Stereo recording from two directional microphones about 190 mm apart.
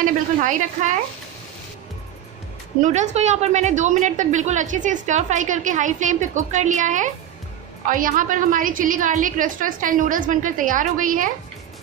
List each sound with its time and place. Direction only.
0.0 s a woman's voice: 45° right (ahead or behind)
2.8 s a woman's voice: 40° right (ahead or behind)